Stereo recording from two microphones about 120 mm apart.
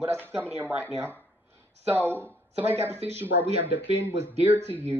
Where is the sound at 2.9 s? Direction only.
60° right (ahead or behind).